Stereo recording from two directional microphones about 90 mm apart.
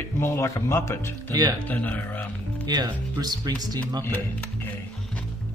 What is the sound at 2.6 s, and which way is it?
Speech, 50° right (ahead or behind).